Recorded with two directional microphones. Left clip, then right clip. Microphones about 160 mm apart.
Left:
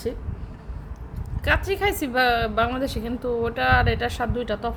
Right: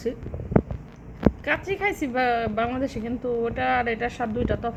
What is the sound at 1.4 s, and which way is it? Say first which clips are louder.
A woman's voice: left 8 dB; 30° left (ahead or behind).